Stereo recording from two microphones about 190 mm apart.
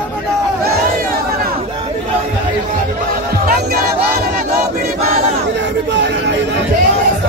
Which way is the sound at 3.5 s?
50° right (ahead or behind).